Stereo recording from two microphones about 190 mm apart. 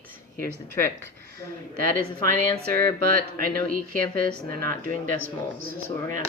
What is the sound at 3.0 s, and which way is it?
Speech, 50° right (ahead or behind).